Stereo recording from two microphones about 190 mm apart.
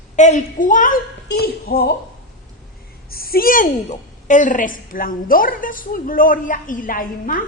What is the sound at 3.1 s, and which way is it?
A woman's voice, 50° left (ahead or behind).